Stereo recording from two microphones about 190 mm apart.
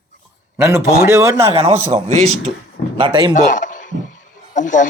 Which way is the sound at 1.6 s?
30° right (ahead or behind).